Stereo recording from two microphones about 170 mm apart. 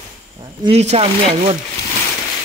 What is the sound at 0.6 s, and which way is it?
Speech, 40° right (ahead or behind).